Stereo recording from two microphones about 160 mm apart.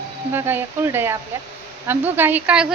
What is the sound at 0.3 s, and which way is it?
A woman's voice, 15° right (ahead or behind).